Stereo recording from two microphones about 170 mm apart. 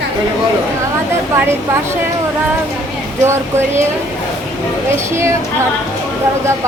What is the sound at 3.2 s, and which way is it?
Speech, 15° right (ahead or behind).